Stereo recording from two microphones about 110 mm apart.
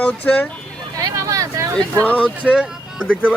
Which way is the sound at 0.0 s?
10° left (ahead or behind).